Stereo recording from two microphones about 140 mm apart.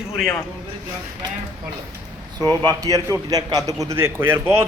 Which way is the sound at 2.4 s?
30° right (ahead or behind).